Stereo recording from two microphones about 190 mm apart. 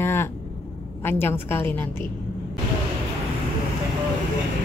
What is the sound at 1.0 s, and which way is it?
Speech, 10° left (ahead or behind).